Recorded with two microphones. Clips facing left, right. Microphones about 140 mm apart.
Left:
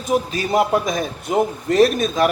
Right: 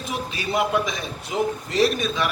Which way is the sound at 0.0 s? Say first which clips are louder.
Left 8 dB; 40° left (ahead or behind).